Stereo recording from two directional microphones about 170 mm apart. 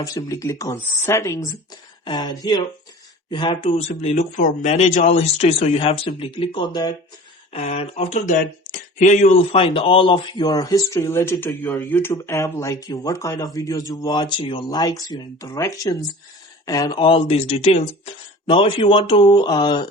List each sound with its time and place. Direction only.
0.0 s speech: 20° left (ahead or behind)
7.5 s speech: 35° left (ahead or behind)